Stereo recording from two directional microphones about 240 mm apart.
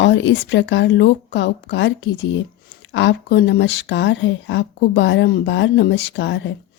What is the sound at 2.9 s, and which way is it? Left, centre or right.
Speech, left.